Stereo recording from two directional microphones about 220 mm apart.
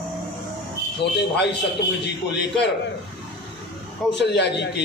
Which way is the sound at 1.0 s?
50° left (ahead or behind).